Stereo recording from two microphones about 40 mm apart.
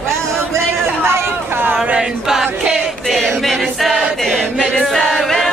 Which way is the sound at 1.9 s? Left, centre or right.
Centre.